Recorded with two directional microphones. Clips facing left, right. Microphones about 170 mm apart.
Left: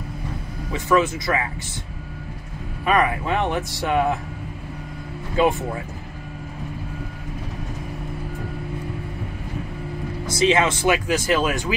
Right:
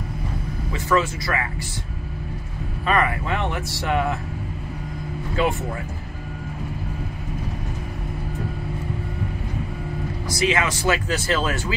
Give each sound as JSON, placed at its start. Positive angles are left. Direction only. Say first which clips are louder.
{"t": 0.7, "sound": "speech", "louder": "left 2 dB", "side_deg": 20}
{"t": 2.9, "sound": "speech", "louder": "left 2 dB", "side_deg": 20}
{"t": 5.4, "sound": "speech", "louder": "left 4 dB", "side_deg": 20}
{"t": 10.3, "sound": "speech", "louder": "left 4 dB", "side_deg": 25}